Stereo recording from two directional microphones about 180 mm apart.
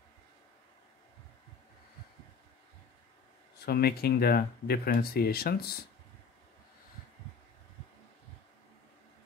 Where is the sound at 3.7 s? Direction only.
60° left (ahead or behind).